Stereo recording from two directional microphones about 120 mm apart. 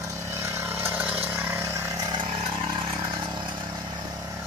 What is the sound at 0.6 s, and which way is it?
Chainsaw, 15° right (ahead or behind).